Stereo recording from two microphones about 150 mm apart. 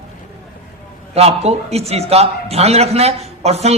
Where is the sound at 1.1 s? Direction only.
45° right (ahead or behind).